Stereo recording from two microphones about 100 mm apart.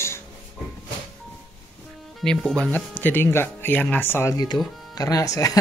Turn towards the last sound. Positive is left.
turn(degrees=35)  # may be behind; listen again after turning